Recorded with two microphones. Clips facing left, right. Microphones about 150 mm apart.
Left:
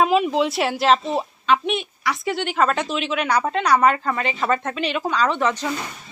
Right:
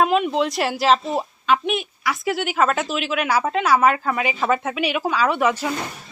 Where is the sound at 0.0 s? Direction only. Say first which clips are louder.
Left 1 dB; centre (ahead or behind).